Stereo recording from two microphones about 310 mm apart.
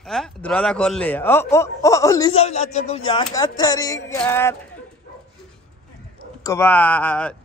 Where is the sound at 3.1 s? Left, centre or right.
Centre.